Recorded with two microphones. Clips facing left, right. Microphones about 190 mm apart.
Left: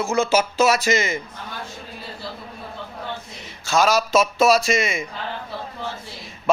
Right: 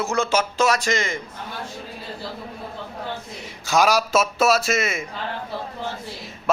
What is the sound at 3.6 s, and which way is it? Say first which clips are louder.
A man's voice: even; 15° right (ahead or behind).